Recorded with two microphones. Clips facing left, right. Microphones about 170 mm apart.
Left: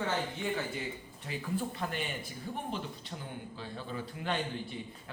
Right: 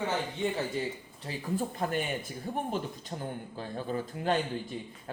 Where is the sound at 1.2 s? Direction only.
40° right (ahead or behind).